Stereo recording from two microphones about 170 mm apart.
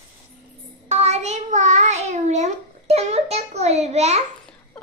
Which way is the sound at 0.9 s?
40° right (ahead or behind).